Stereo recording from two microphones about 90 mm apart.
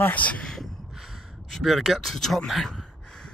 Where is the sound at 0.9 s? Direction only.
Centre (ahead or behind).